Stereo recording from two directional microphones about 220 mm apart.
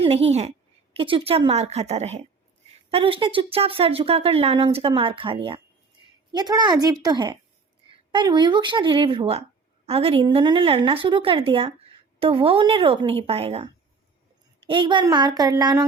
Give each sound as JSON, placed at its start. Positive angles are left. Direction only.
{"t": 0.0, "sound": "speech", "side_deg": -30}
{"t": 14.7, "sound": "speech", "side_deg": -20}